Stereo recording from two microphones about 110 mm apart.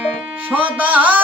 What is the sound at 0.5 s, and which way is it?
Music, 15° right (ahead or behind).